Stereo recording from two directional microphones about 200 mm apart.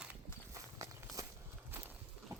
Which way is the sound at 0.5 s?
15° right (ahead or behind).